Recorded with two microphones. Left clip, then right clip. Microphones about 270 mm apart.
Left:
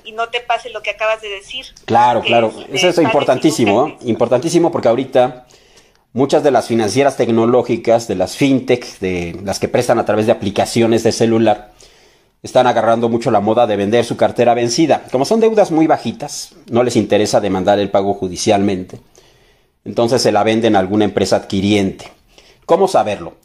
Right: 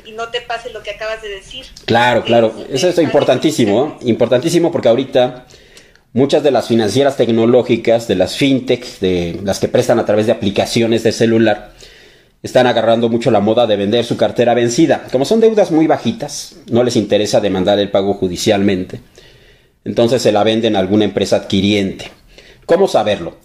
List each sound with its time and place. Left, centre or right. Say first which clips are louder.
0.3 s speech: left 2 dB; left
1.9 s speech: even; centre